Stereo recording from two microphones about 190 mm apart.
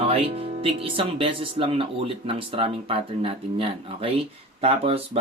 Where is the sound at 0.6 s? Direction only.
30° right (ahead or behind).